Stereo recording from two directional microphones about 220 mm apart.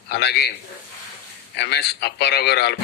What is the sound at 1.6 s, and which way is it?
A man's voice, 50° left (ahead or behind).